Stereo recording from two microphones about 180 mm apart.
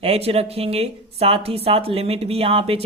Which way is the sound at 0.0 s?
35° right (ahead or behind).